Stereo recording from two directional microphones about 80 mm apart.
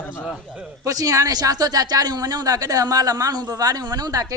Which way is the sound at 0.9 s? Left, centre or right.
Right.